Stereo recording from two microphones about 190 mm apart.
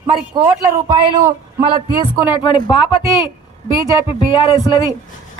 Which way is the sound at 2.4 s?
25° left (ahead or behind).